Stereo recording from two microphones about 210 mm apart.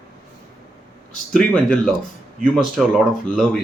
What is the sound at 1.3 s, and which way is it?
Speech, centre (ahead or behind).